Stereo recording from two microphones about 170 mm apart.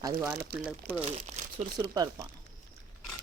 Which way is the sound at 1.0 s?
40° right (ahead or behind).